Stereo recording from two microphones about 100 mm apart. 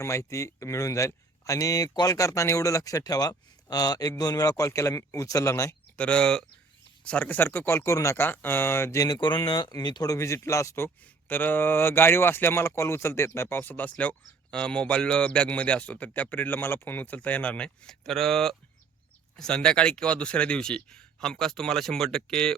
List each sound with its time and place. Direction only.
0.0 s speech: 30° left (ahead or behind)
6.0 s speech: 10° left (ahead or behind); by 8.1 s 30° left (ahead or behind)
8.1 s speech: 20° left (ahead or behind)
10.8 s speech: 15° left (ahead or behind)